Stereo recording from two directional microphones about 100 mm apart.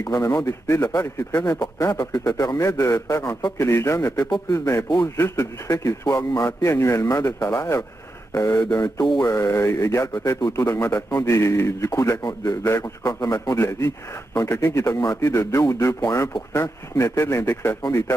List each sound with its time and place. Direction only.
0.0 s a man's voice: 30° left (ahead or behind)